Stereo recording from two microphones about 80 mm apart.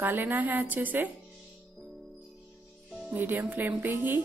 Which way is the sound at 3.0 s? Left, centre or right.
Right.